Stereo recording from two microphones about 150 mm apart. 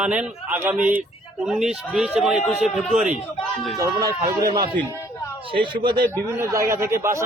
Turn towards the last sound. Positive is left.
turn(degrees=-20)  # may be behind; listen again after turning